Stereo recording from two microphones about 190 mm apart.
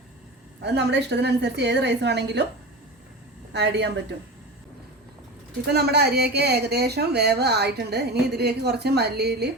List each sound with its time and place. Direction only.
0.6 s a woman's voice: 60° right (ahead or behind)
3.5 s a woman's voice: 65° right (ahead or behind)
5.6 s a woman's voice: 60° right (ahead or behind)